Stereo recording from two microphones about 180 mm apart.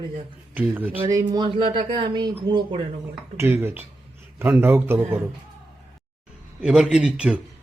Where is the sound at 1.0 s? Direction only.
20° right (ahead or behind).